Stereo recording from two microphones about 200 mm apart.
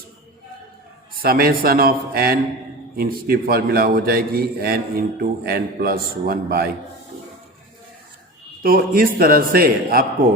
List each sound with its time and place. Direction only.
1.2 s speech: 50° right (ahead or behind)
8.6 s speech: 45° right (ahead or behind)